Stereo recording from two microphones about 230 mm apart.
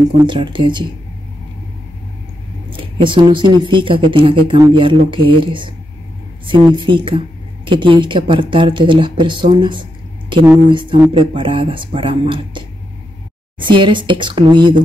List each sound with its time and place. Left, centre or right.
0.2 s speech: right
2.7 s speech: right